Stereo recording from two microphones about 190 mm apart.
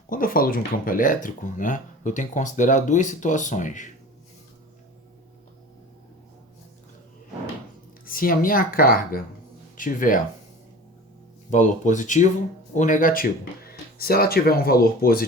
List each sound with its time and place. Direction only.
0.1 s speech: 45° left (ahead or behind)
8.0 s speech: 50° left (ahead or behind)
11.5 s speech: 40° left (ahead or behind)